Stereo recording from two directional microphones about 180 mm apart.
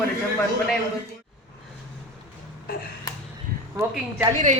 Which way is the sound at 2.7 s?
55° left (ahead or behind).